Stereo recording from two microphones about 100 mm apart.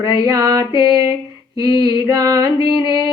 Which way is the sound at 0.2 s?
35° right (ahead or behind).